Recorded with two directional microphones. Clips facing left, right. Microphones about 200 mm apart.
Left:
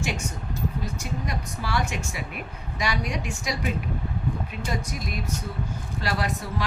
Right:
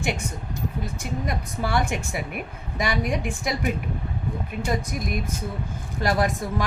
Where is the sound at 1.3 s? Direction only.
55° right (ahead or behind).